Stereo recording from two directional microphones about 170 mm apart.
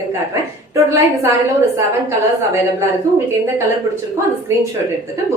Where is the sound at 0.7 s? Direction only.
15° right (ahead or behind).